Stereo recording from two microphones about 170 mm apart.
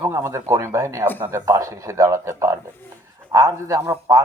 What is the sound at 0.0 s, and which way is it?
Speech, 15° right (ahead or behind).